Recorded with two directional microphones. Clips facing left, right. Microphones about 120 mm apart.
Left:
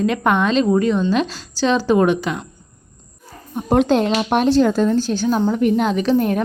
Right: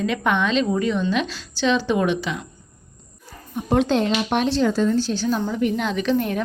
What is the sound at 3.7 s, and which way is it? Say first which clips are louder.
Speech: left 4 dB; 45° left (ahead or behind).